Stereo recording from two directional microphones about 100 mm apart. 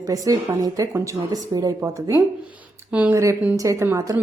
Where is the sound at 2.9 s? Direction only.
15° right (ahead or behind).